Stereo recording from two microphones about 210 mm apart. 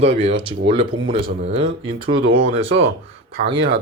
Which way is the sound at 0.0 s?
30° right (ahead or behind).